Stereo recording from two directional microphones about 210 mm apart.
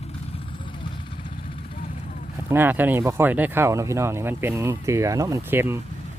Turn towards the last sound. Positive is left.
turn(degrees=-10)  # may be behind; listen again after turning